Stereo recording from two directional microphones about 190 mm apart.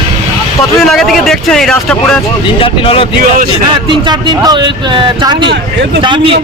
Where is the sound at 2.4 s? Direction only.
30° left (ahead or behind).